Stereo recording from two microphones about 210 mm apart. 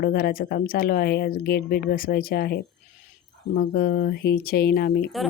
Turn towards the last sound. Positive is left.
turn(degrees=0)  # may be behind; listen again after turning